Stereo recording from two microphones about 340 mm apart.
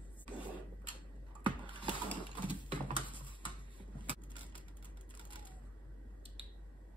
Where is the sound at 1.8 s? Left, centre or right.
Centre.